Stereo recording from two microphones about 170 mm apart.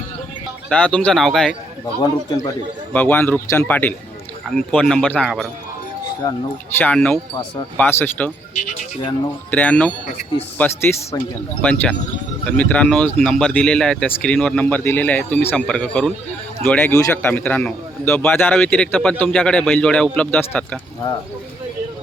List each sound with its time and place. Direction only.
0.7 s a man's voice: 5° left (ahead or behind)
2.9 s a man's voice: 10° left (ahead or behind)
6.2 s speech: 20° left (ahead or behind)
6.7 s speech: 10° left (ahead or behind)
9.5 s speech: 10° left (ahead or behind)